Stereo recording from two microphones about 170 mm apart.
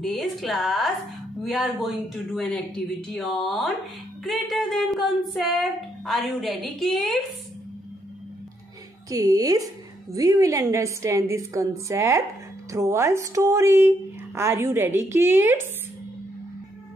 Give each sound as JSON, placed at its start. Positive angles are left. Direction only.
{"t": 0.0, "sound": "speech", "side_deg": 0}
{"t": 9.1, "sound": "speech", "side_deg": -20}